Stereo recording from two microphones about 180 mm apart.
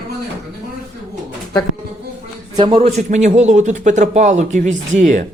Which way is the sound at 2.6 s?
30° right (ahead or behind).